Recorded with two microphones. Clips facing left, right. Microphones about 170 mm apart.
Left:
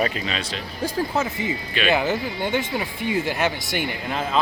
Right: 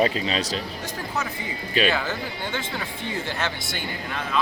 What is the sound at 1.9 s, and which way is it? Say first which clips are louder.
Speech: left 6 dB; 15° left (ahead or behind).